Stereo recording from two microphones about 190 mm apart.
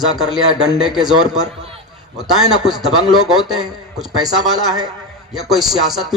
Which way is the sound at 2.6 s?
Centre (ahead or behind).